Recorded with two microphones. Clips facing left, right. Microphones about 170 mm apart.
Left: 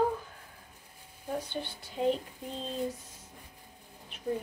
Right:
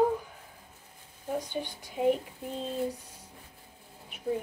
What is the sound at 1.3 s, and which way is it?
Speech, 10° right (ahead or behind).